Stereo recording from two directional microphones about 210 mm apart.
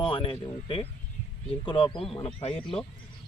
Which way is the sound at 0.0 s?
25° left (ahead or behind).